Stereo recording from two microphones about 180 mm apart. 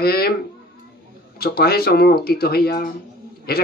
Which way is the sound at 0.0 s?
60° left (ahead or behind).